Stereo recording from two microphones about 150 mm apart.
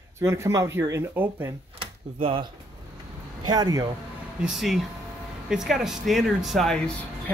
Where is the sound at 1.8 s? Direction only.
35° right (ahead or behind).